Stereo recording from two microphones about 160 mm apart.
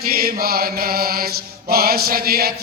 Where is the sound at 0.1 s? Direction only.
70° right (ahead or behind).